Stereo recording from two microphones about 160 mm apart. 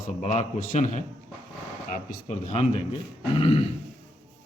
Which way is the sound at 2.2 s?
40° left (ahead or behind).